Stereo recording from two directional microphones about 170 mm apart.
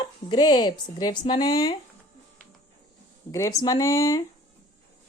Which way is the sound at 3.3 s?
20° left (ahead or behind).